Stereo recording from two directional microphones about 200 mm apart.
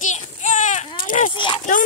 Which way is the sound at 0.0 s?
35° left (ahead or behind).